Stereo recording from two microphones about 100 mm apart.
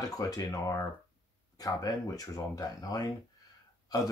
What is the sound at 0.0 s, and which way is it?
Speech, 35° left (ahead or behind).